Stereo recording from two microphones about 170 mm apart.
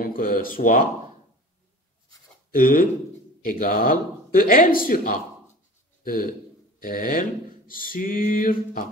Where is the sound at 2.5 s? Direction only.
55° left (ahead or behind).